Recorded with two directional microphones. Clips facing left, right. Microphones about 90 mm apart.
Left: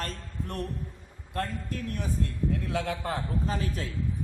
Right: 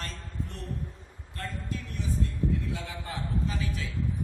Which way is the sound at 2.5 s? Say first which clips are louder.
Left 4 dB; 65° left (ahead or behind).